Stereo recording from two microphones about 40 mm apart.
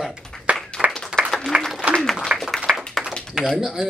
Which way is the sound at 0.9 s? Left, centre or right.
Centre.